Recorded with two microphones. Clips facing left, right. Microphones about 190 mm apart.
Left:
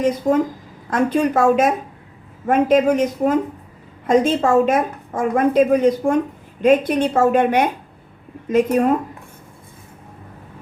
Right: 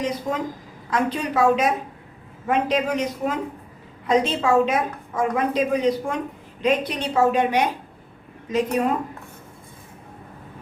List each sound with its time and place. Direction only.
0.0 s a woman's voice: 50° left (ahead or behind)